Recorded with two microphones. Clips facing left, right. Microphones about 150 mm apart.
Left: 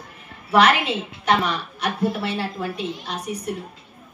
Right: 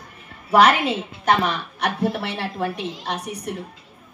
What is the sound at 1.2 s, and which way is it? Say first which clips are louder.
A woman's voice: right 1 dB; 60° right (ahead or behind).